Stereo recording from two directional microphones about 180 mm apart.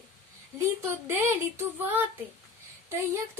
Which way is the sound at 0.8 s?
15° right (ahead or behind).